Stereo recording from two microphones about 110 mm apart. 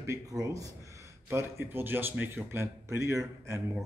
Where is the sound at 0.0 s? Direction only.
30° right (ahead or behind).